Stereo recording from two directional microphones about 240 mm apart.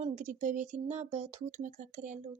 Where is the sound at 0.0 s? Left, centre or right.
Right.